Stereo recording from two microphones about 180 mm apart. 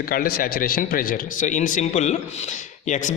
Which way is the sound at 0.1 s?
55° left (ahead or behind).